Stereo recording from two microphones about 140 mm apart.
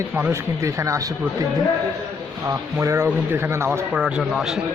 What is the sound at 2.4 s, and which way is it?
Speech, 20° right (ahead or behind).